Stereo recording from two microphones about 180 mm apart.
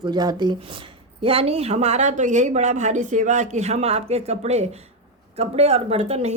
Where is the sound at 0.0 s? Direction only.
25° right (ahead or behind).